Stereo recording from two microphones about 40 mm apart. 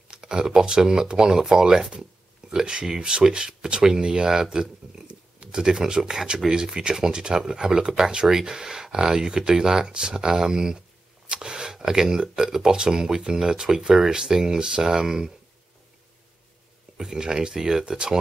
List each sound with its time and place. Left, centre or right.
0.1 s speech: centre
16.9 s speech: centre